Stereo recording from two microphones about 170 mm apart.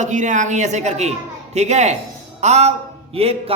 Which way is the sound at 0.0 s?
45° right (ahead or behind).